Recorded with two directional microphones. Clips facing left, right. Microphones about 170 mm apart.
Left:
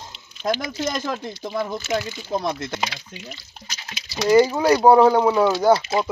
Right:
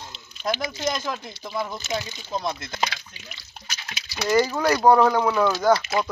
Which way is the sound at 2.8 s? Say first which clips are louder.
Even; 30° left (ahead or behind).